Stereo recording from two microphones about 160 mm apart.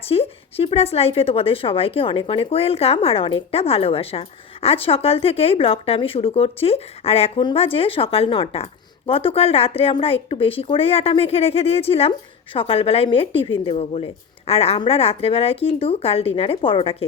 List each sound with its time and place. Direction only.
0.1 s a woman's voice: 40° left (ahead or behind)